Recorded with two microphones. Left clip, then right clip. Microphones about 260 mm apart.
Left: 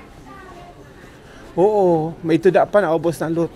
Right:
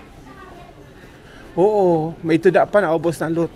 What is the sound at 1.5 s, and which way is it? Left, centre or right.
A man's voice, centre.